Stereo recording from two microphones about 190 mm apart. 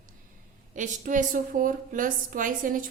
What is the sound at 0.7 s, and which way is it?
A woman's voice, 40° right (ahead or behind).